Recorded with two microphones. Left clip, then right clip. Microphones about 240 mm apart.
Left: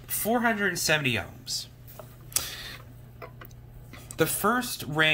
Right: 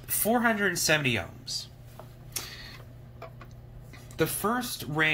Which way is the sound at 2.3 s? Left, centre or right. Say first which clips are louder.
Left 6 dB; left.